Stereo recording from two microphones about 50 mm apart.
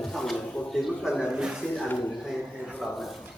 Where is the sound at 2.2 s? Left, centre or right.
Centre.